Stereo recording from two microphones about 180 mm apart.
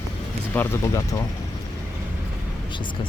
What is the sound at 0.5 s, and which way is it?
Speech, 15° left (ahead or behind).